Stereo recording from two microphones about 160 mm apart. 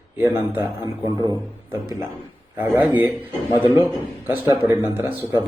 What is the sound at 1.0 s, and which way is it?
Speech, 25° left (ahead or behind).